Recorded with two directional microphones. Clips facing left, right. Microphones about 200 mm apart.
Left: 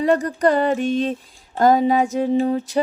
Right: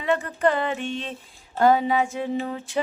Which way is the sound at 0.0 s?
40° left (ahead or behind).